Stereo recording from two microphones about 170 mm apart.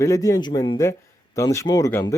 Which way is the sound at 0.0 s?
20° left (ahead or behind).